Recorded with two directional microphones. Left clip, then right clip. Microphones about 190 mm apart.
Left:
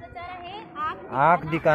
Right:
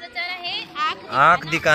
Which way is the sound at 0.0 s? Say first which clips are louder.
Right 9 dB; 35° left (ahead or behind).